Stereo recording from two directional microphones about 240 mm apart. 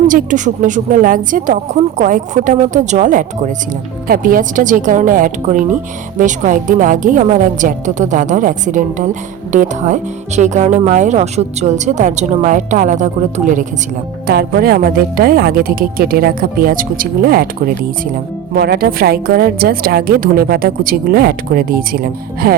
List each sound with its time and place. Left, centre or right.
0.1 s a woman's voice: right